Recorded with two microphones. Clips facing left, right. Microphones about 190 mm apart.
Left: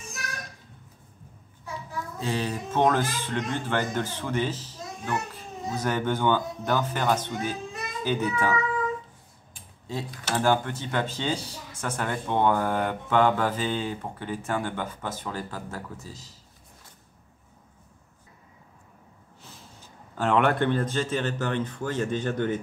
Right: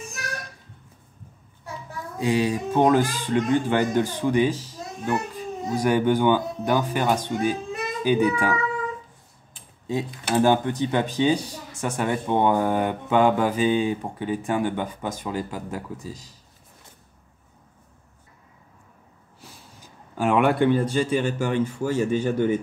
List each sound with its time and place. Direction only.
2.1 s speech: 15° right (ahead or behind)
9.8 s speech: 15° right (ahead or behind)
19.8 s speech: 10° right (ahead or behind)